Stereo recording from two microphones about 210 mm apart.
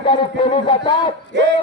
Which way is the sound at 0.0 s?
25° left (ahead or behind).